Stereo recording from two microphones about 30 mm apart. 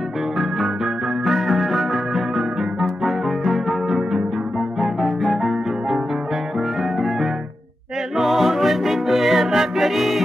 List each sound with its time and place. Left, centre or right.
1.2 s music: centre
8.2 s music: centre